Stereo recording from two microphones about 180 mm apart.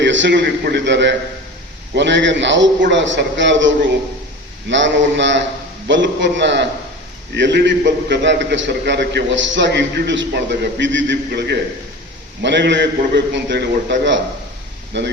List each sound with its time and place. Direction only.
0.0 s a man's voice: 85° right; by 11.6 s 65° right (ahead or behind)
12.4 s a man's voice: 75° right (ahead or behind)